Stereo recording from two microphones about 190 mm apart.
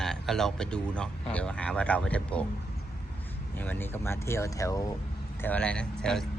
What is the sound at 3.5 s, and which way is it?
Speech, 10° left (ahead or behind).